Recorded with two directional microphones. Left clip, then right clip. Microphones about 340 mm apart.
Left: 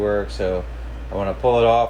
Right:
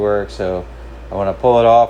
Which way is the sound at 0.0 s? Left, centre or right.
Right.